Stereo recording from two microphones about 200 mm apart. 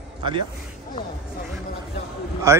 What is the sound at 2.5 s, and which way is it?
Speech, 15° right (ahead or behind).